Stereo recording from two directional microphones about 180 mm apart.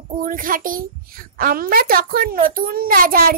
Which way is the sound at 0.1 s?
50° right (ahead or behind).